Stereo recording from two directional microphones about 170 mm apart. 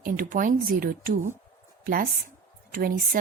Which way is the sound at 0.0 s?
55° right (ahead or behind).